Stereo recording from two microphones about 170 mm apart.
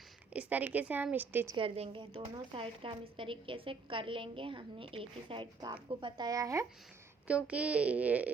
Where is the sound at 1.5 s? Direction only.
30° right (ahead or behind).